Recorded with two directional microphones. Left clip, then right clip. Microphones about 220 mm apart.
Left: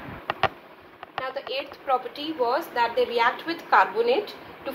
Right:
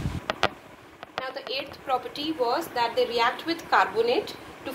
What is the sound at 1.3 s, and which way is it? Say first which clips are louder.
A woman's voice: left 1 dB; 30° right (ahead or behind).